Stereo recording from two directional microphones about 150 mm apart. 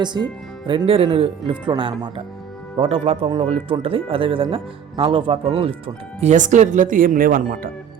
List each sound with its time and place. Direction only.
0.0 s speech: 30° right (ahead or behind); by 7.7 s 65° right (ahead or behind)